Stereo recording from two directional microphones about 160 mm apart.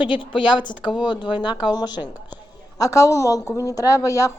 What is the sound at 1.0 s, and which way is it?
Speech, 30° left (ahead or behind).